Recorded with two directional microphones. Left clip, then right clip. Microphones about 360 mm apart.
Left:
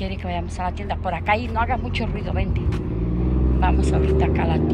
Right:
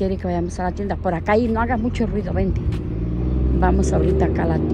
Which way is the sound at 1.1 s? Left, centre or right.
Right.